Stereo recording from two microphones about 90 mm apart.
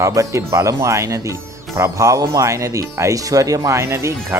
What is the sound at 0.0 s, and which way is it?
Speech, 35° right (ahead or behind).